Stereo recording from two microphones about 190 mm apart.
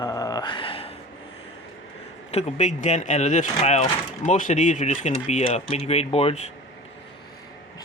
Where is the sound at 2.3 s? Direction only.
40° left (ahead or behind).